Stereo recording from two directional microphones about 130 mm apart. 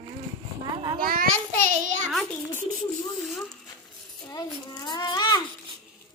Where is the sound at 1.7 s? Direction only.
75° right (ahead or behind).